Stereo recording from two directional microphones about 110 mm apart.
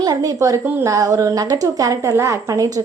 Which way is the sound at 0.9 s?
30° right (ahead or behind).